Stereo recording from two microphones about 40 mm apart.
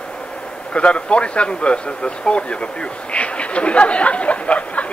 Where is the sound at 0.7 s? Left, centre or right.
Left.